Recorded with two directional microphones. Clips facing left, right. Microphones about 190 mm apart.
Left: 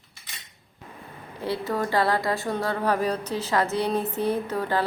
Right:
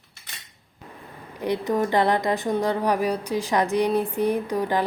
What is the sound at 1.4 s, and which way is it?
A woman's voice, 15° right (ahead or behind).